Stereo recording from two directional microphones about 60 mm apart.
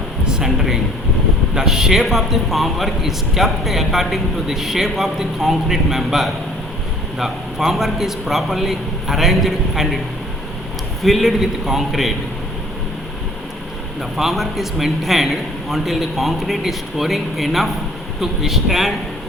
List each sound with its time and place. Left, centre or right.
0.3 s a man's voice: centre
11.0 s a man's voice: centre
14.2 s a man's voice: centre